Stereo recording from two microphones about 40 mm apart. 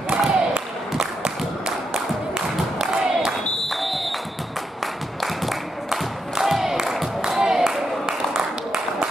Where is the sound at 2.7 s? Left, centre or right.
Centre.